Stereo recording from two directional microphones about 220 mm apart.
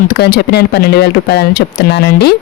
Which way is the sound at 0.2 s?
45° left (ahead or behind).